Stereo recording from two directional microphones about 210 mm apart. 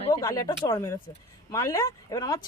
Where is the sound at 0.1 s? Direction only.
15° left (ahead or behind).